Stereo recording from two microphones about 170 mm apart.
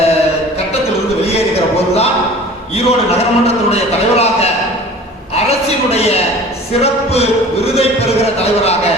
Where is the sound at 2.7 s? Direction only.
35° left (ahead or behind).